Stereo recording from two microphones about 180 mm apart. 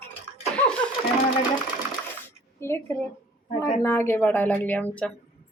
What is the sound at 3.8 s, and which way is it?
A woman's voice, 15° left (ahead or behind).